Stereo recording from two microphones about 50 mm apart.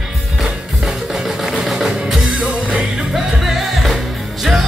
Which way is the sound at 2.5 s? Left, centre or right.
Right.